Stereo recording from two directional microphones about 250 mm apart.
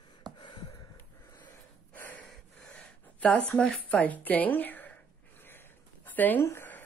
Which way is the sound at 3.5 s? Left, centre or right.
Centre.